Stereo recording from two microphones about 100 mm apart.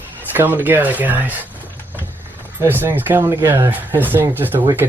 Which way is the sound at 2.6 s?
20° right (ahead or behind).